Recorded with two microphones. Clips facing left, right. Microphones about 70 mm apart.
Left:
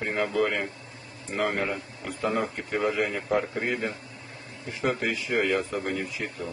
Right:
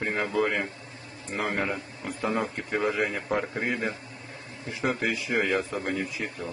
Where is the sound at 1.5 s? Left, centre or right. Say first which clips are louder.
Even; centre.